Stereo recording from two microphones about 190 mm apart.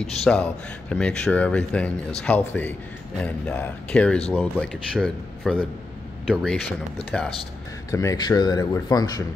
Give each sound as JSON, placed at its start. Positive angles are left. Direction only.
{"t": 0.0, "sound": "speech", "side_deg": 5}
{"t": 7.9, "sound": "speech", "side_deg": 15}